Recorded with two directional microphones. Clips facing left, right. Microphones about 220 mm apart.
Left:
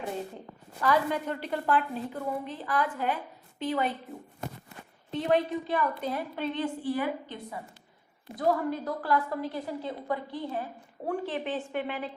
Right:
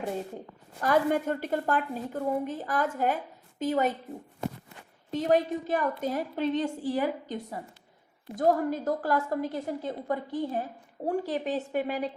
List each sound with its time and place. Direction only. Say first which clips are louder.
0.8 s a woman's voice: right 2 dB; 45° right (ahead or behind)
5.1 s a woman's voice: right 1 dB; 40° right (ahead or behind)